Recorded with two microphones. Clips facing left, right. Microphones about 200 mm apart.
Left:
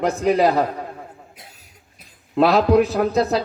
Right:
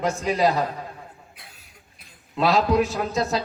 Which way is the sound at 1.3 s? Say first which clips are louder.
Left 4 dB; 40° left (ahead or behind).